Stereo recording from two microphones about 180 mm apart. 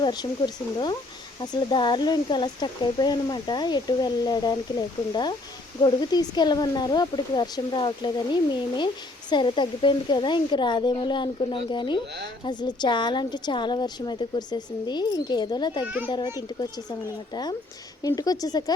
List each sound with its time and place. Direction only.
0.0 s a woman's voice: 25° left (ahead or behind)
5.8 s a woman's voice: 25° left (ahead or behind)
18.0 s a woman's voice: 20° left (ahead or behind)